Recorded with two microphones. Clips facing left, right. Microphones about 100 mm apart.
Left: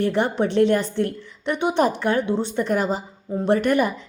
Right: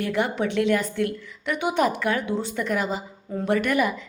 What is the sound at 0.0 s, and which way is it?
A woman's voice, 30° left (ahead or behind).